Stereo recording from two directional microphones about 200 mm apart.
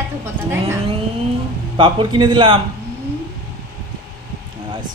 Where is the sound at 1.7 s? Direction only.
25° right (ahead or behind).